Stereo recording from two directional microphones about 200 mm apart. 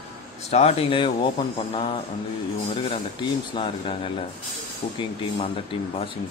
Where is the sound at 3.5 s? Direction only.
25° left (ahead or behind).